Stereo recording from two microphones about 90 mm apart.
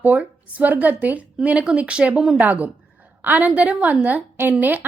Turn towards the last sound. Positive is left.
turn(degrees=-20)  # may be behind; listen again after turning